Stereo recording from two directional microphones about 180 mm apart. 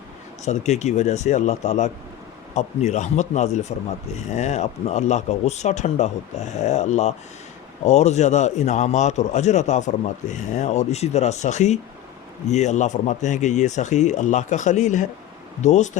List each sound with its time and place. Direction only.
0.4 s speech: 40° left (ahead or behind)